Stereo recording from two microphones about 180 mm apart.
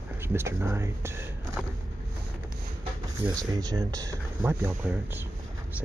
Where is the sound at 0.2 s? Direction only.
15° right (ahead or behind).